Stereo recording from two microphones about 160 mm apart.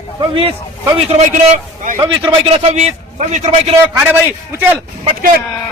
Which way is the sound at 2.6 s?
40° right (ahead or behind).